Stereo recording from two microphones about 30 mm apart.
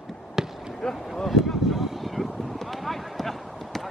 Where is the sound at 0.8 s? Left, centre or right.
Centre.